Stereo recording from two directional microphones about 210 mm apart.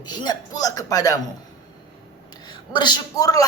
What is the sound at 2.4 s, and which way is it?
A woman's voice, 20° left (ahead or behind).